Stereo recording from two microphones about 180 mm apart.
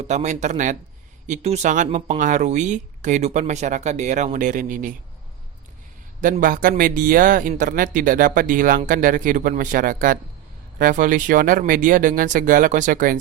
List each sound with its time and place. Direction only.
0.0 s speech: 40° right (ahead or behind)
6.2 s speech: 50° right (ahead or behind)